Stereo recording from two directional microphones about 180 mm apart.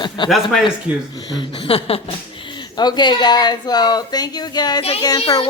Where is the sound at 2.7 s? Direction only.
25° left (ahead or behind).